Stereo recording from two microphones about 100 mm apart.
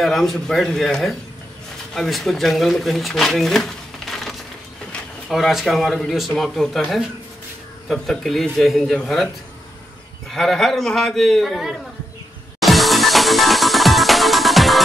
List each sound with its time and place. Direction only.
0.0 s a man's voice: centre (ahead or behind)
7.9 s a man's voice: 5° left (ahead or behind)
10.3 s a man's voice: 5° left (ahead or behind)
12.5 s music: centre (ahead or behind)